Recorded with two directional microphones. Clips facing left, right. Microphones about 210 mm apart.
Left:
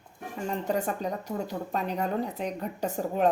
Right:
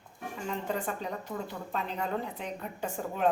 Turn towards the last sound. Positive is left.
turn(degrees=40)  # may be behind; listen again after turning